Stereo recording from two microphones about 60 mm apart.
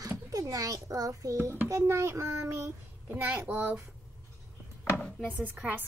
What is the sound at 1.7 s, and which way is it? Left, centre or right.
A child's voice, right.